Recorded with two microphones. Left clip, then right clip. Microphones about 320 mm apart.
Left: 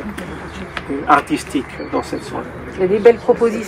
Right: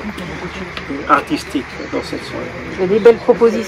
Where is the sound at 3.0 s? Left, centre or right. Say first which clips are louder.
Right 2 dB; right.